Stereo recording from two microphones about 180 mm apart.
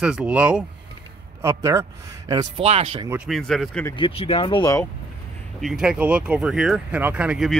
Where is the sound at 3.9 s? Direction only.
30° left (ahead or behind).